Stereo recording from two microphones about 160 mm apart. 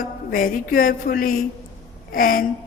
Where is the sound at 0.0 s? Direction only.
60° left (ahead or behind).